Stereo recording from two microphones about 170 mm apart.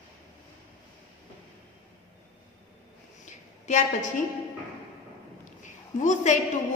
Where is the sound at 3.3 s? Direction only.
45° left (ahead or behind).